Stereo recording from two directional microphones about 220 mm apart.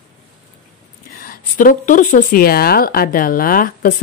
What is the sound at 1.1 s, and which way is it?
Speech, 40° left (ahead or behind).